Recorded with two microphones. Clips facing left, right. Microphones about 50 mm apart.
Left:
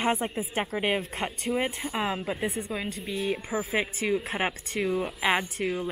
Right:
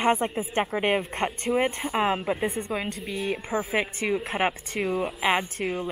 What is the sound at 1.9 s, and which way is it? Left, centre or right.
Speech, right.